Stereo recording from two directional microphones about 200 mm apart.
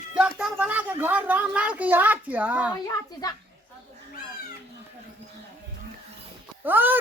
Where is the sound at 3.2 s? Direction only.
20° left (ahead or behind).